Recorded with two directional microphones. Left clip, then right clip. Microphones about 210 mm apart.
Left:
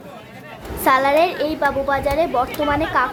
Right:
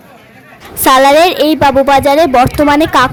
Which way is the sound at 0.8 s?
50° right (ahead or behind).